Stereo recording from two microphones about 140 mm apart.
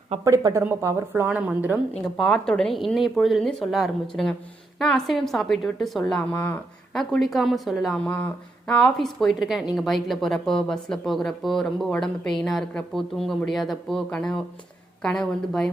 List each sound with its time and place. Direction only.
0.3 s a woman's voice: 20° right (ahead or behind)
1.9 s speech: 5° left (ahead or behind)